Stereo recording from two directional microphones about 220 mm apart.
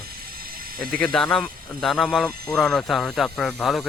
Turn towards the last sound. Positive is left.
turn(degrees=0)  # may be behind; listen again after turning